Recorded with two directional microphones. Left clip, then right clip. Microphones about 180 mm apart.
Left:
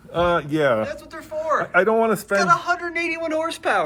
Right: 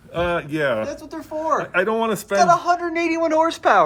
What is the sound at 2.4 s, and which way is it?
A man's voice, 35° right (ahead or behind).